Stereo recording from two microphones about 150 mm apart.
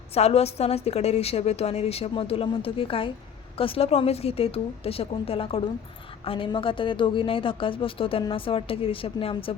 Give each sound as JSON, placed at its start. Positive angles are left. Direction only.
{"t": 0.1, "sound": "a woman's voice", "side_deg": 45}